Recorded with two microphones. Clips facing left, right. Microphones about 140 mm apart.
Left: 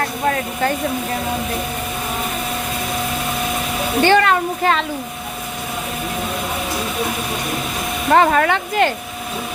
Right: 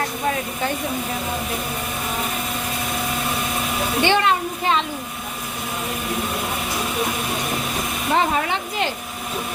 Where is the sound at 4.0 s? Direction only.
45° left (ahead or behind).